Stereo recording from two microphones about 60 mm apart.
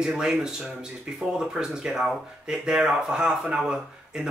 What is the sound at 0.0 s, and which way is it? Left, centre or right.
Speech, centre.